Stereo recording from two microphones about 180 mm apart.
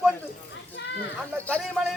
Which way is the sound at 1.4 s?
5° left (ahead or behind).